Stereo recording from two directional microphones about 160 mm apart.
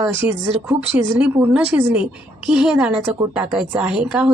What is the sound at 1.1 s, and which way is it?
Speech, 10° right (ahead or behind).